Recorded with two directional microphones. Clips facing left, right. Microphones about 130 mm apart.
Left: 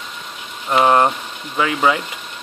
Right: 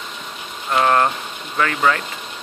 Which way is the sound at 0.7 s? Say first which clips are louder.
Left 3 dB; 15° left (ahead or behind).